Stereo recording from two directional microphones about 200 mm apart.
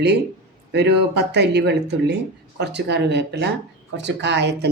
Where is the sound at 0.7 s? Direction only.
55° right (ahead or behind).